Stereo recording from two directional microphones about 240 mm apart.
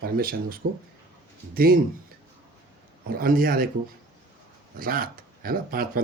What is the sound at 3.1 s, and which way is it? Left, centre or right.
Speech, right.